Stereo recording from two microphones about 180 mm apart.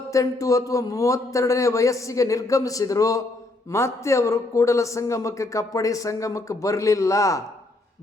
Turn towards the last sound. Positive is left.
turn(degrees=15)  # may be behind; listen again after turning